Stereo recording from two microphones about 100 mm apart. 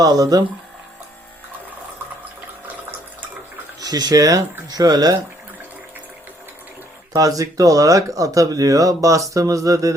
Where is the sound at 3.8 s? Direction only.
40° right (ahead or behind).